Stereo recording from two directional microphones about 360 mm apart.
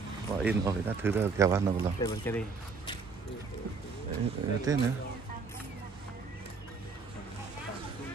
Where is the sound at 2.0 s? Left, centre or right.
Centre.